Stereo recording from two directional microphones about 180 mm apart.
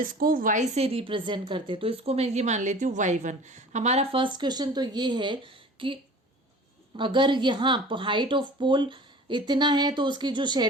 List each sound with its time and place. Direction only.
0.0 s a woman's voice: 50° right (ahead or behind); by 10.7 s 25° right (ahead or behind)